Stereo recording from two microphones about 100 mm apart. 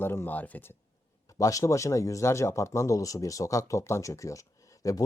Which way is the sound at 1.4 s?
35° left (ahead or behind).